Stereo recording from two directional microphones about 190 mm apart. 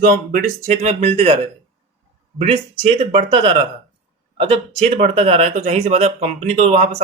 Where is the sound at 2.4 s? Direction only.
30° right (ahead or behind).